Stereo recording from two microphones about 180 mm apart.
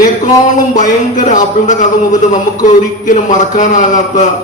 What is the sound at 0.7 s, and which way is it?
A man's voice, 45° left (ahead or behind).